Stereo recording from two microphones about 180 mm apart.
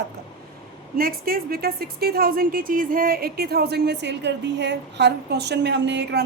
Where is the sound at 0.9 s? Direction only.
55° right (ahead or behind); by 6.2 s 75° right (ahead or behind).